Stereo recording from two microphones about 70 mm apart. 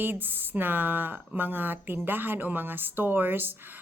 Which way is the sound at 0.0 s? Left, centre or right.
Right.